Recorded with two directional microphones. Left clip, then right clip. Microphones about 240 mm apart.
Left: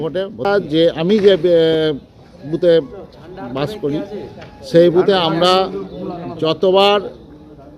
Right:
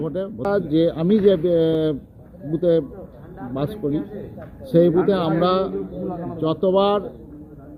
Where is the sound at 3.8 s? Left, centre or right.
Left.